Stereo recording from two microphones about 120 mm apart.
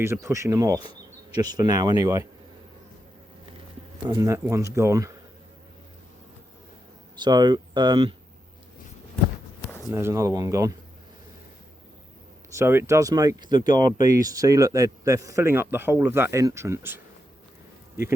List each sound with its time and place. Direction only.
0.0 s a man's voice: 25° right (ahead or behind)
4.1 s a man's voice: 25° right (ahead or behind)
7.2 s speech: 35° right (ahead or behind)
9.9 s a man's voice: 20° right (ahead or behind)
12.5 s a man's voice: 20° right (ahead or behind)